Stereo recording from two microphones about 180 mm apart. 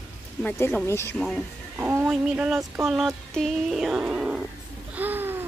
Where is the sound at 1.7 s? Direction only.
10° right (ahead or behind).